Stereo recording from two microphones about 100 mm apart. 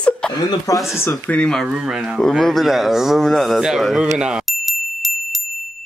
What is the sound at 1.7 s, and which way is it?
Speech, 5° right (ahead or behind).